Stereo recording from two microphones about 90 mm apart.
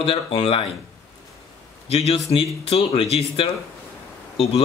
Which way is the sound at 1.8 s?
90° left.